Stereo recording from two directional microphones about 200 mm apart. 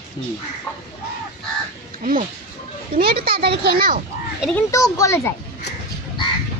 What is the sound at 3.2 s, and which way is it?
Speech, 50° right (ahead or behind).